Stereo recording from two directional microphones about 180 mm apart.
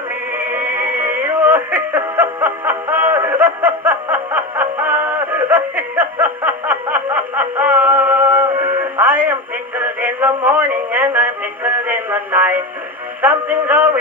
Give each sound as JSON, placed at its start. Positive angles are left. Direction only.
{"t": 0.4, "sound": "music", "side_deg": -10}